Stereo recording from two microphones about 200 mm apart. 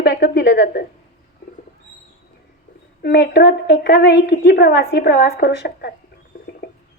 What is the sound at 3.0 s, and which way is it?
A woman's voice, 55° left (ahead or behind).